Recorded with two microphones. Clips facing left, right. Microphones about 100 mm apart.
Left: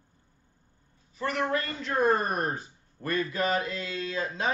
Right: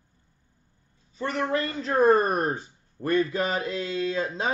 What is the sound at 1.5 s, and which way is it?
Speech, 35° right (ahead or behind).